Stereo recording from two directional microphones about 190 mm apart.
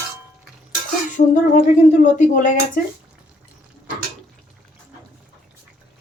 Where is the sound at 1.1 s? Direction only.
40° left (ahead or behind).